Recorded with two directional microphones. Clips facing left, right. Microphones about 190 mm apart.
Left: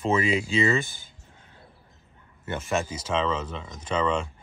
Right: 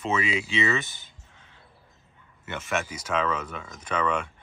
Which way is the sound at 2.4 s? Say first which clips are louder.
Left 2 dB; 35° left (ahead or behind).